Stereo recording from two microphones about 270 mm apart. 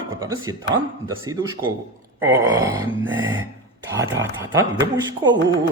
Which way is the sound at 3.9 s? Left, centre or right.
Centre.